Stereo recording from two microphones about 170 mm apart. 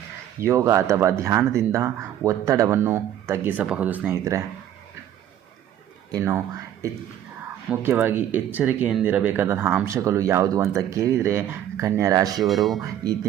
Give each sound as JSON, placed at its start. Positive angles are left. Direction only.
{"t": 0.4, "sound": "speech", "side_deg": -15}
{"t": 6.1, "sound": "speech", "side_deg": -20}
{"t": 12.5, "sound": "speech", "side_deg": 0}